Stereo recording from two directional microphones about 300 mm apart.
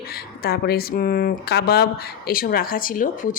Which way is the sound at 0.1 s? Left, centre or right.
Left.